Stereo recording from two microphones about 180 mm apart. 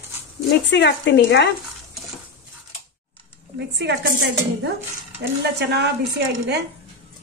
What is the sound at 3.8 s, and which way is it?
Speech, 70° right (ahead or behind).